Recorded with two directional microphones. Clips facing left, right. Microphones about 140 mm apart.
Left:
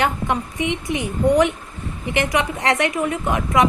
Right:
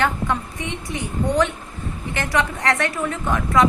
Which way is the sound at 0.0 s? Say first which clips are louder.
Left 1 dB; 20° left (ahead or behind).